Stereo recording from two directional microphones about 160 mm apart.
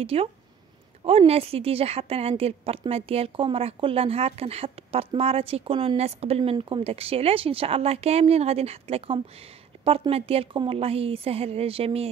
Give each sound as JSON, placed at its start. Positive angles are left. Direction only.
{"t": 0.0, "sound": "a woman's voice", "side_deg": -35}